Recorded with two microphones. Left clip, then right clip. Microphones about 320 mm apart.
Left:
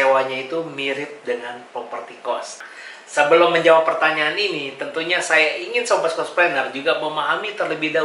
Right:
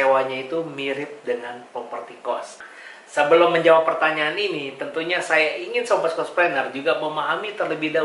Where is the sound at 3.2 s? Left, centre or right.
Centre.